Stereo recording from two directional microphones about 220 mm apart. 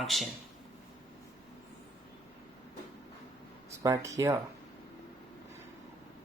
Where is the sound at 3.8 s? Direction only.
15° right (ahead or behind).